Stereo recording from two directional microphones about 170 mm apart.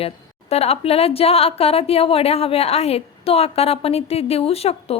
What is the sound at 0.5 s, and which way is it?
A woman's voice, 35° left (ahead or behind).